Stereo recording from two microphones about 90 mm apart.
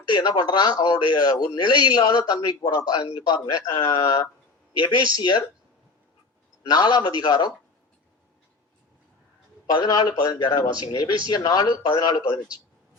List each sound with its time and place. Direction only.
0.1 s a man's voice: 50° left (ahead or behind)
1.4 s a man's voice: 60° left (ahead or behind); by 4.3 s 45° left (ahead or behind)
4.8 s speech: 60° left (ahead or behind)
6.7 s a man's voice: 50° left (ahead or behind)
9.6 s a man's voice: 50° left (ahead or behind)